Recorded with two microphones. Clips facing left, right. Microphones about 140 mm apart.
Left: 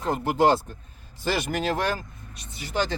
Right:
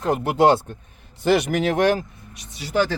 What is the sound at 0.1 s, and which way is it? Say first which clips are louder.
Speech: right 4 dB; 70° right (ahead or behind).